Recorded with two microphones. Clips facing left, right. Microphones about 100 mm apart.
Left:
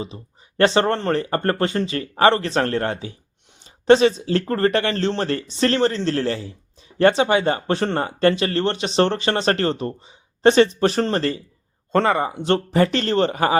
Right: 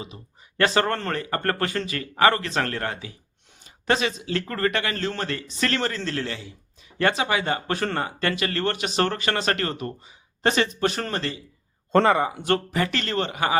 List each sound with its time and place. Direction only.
0.0 s speech: 30° left (ahead or behind)
11.9 s speech: centre (ahead or behind)
12.3 s speech: 25° left (ahead or behind)